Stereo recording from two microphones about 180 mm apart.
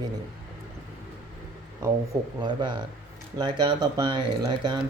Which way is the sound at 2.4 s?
25° right (ahead or behind).